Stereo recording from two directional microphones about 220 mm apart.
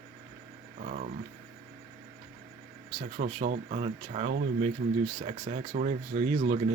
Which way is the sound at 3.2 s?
35° right (ahead or behind).